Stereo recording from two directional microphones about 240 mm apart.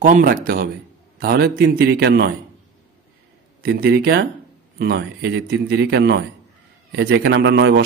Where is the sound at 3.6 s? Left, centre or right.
Right.